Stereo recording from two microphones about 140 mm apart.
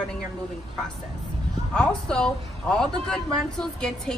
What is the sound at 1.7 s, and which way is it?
Speech, 5° left (ahead or behind).